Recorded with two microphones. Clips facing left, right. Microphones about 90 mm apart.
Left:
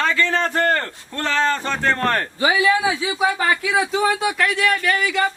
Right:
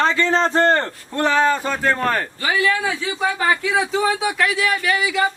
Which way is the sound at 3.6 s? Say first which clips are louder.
Even; centre (ahead or behind).